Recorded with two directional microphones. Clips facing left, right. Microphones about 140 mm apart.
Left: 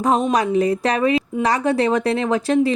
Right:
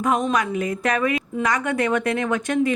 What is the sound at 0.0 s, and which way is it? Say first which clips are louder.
A woman's voice: left 3 dB; 35° left (ahead or behind).